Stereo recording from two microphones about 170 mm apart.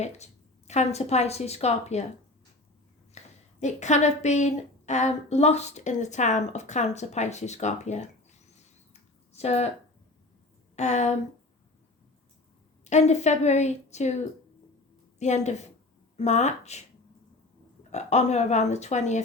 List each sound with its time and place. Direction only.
0.0 s speech: 40° left (ahead or behind)
3.2 s a sound: 40° left (ahead or behind)
3.6 s a woman's voice: 45° left (ahead or behind)
10.8 s speech: 40° left (ahead or behind)
12.8 s speech: 40° left (ahead or behind)
17.9 s speech: 40° left (ahead or behind)